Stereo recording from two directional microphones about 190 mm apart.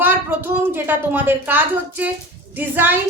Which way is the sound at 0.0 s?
10° right (ahead or behind).